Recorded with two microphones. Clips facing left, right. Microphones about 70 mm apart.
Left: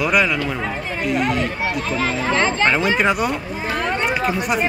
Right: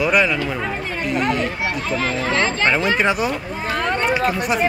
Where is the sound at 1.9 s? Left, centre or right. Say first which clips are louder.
Even; centre.